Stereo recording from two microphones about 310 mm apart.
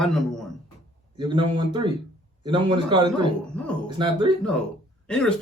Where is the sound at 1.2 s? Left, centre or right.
Centre.